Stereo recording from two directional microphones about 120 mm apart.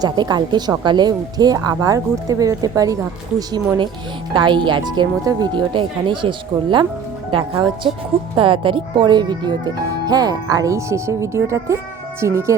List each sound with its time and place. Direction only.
0.0 s speech: 35° right (ahead or behind)